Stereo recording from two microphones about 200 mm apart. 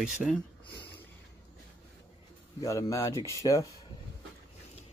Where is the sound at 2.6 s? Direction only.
15° left (ahead or behind).